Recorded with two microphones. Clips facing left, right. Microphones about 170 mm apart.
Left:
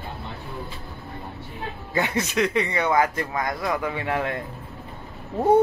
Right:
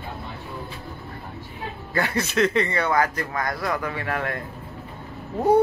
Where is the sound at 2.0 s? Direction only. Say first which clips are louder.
Right 1 dB; 20° left (ahead or behind).